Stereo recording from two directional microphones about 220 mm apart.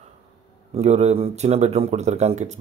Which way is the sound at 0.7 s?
30° right (ahead or behind).